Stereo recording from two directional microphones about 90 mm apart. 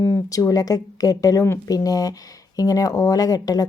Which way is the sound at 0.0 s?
35° left (ahead or behind).